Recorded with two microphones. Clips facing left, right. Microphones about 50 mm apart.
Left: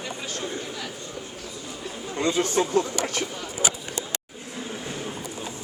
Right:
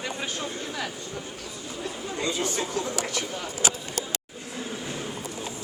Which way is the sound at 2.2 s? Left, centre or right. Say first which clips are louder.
Left 6 dB; left.